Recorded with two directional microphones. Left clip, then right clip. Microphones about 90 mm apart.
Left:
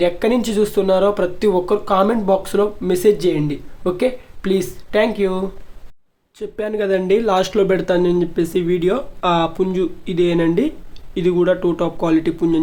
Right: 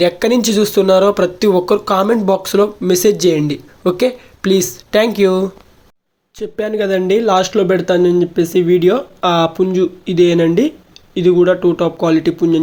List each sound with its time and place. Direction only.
0.0 s speech: 35° right (ahead or behind)
6.4 s a man's voice: 30° right (ahead or behind)
9.5 s a man's voice: 20° right (ahead or behind)
11.1 s a man's voice: 15° right (ahead or behind)